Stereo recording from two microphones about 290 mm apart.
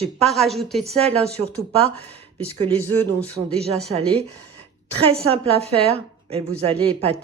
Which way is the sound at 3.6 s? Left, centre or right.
Right.